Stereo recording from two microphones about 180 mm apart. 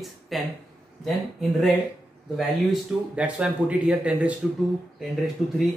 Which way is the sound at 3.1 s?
5° right (ahead or behind).